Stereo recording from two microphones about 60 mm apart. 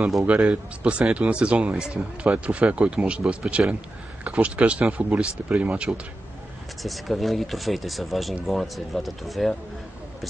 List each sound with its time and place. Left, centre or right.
0.3 s speech: right
6.8 s speech: centre